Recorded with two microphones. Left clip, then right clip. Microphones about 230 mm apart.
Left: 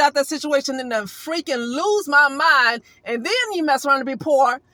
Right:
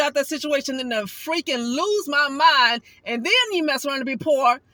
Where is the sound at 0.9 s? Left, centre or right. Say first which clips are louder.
Even; centre.